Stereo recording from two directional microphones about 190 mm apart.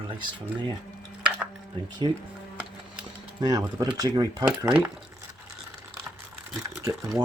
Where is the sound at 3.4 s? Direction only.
15° right (ahead or behind).